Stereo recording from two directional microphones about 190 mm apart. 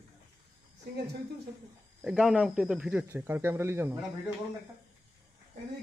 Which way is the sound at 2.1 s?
5° right (ahead or behind).